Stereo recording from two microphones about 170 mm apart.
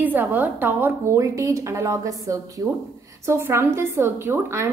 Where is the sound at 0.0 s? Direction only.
10° right (ahead or behind).